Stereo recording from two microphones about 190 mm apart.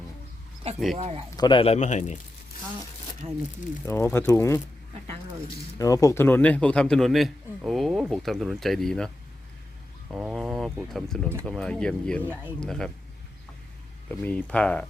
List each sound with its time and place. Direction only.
0.9 s speech: 35° right (ahead or behind)
1.4 s speech: 25° left (ahead or behind)
3.2 s speech: 30° right (ahead or behind)
3.8 s speech: 15° left (ahead or behind)
5.8 s a man's voice: 15° left (ahead or behind)
10.1 s a man's voice: 5° right (ahead or behind)
12.2 s speech: 10° right (ahead or behind)
12.5 s a man's voice: 5° left (ahead or behind)
14.1 s speech: 5° left (ahead or behind)